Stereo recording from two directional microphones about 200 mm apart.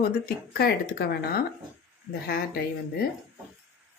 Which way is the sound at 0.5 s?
50° left (ahead or behind).